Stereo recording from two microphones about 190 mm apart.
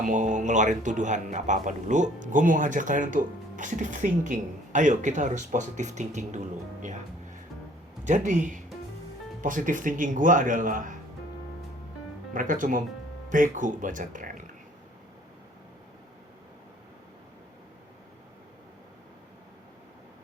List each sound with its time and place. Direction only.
0.0 s speech: 40° right (ahead or behind)
8.0 s speech: 40° right (ahead or behind)
12.3 s speech: 45° right (ahead or behind)